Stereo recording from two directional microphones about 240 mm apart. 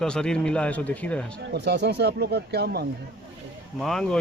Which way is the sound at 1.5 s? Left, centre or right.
Right.